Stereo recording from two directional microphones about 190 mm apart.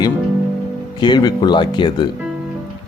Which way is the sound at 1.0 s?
20° left (ahead or behind).